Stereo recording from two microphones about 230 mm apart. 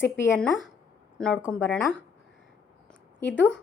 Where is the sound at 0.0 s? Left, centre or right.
Centre.